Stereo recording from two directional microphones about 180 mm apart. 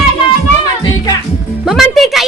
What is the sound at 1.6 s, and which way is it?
Speech, centre (ahead or behind).